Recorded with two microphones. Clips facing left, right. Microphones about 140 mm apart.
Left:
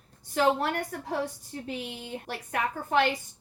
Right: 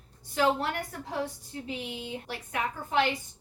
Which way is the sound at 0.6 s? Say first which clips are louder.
Left 3 dB; 50° left (ahead or behind).